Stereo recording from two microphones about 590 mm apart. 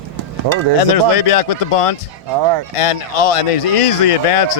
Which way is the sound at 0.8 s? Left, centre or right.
Left.